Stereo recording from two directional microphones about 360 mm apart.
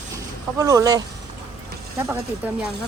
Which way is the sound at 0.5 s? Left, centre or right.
Centre.